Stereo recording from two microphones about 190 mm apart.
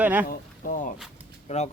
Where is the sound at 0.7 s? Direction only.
45° left (ahead or behind).